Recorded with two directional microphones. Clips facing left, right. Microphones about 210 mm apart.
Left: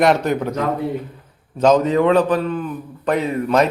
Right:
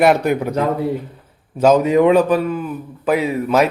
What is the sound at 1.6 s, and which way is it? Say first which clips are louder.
A man's voice: right 2 dB; 10° right (ahead or behind).